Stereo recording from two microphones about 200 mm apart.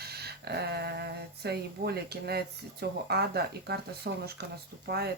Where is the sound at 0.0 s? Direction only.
55° right (ahead or behind).